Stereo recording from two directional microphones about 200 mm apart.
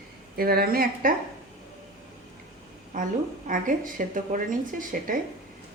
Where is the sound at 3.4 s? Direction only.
40° right (ahead or behind).